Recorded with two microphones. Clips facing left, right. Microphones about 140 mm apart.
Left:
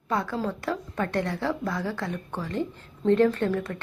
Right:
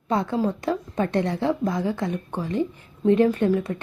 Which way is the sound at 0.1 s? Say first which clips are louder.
Right 5 dB; 25° right (ahead or behind).